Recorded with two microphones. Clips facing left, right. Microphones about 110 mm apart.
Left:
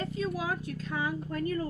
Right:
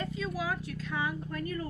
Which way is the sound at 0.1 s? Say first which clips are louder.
Left 2 dB; 40° left (ahead or behind).